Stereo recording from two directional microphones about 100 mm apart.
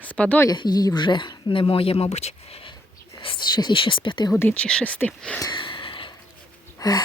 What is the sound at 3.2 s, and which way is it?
Speech, 55° left (ahead or behind).